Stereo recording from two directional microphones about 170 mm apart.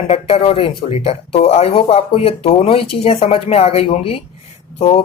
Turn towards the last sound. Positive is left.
turn(degrees=35)  # may be behind; listen again after turning